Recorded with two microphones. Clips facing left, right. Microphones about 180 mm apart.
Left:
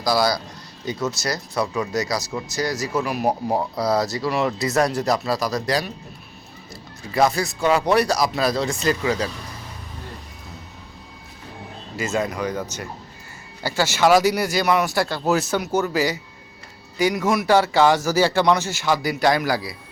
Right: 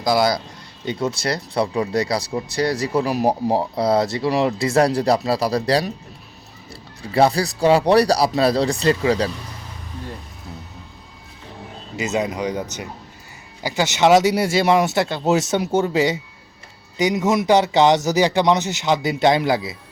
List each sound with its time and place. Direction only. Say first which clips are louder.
0.0 s speech: right 2 dB; 25° right (ahead or behind)
7.0 s speech: right 3 dB; 30° right (ahead or behind)
11.9 s speech: right 2 dB; 20° right (ahead or behind)